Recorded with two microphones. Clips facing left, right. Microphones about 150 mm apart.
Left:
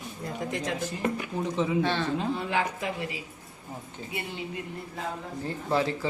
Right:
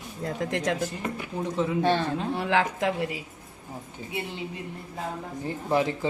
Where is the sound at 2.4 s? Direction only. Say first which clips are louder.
Right 4 dB; 85° right.